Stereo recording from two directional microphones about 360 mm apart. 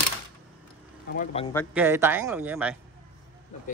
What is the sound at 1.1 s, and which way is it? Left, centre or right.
Speech, centre.